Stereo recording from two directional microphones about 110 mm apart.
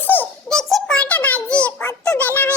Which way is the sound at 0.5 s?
5° left (ahead or behind).